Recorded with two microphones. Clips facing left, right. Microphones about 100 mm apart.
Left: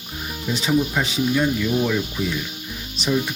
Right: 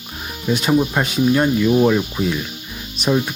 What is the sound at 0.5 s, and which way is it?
Speech, 55° right (ahead or behind).